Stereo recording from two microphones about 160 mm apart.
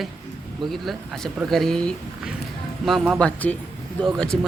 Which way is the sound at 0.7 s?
Centre (ahead or behind).